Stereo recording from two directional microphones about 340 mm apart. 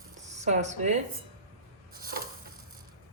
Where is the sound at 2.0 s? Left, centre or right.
Right.